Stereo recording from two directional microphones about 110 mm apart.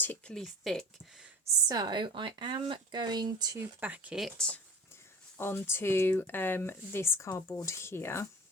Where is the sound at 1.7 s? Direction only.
40° right (ahead or behind).